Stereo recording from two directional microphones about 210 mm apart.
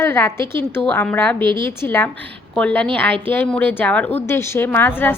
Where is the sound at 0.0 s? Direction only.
10° left (ahead or behind).